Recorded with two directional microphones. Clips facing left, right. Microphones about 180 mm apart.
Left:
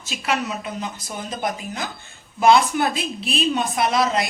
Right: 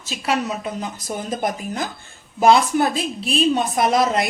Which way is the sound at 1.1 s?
45° right (ahead or behind).